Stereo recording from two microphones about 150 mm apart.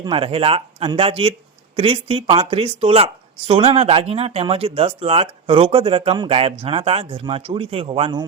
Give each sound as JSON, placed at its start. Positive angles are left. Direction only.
{"t": 0.0, "sound": "speech", "side_deg": -35}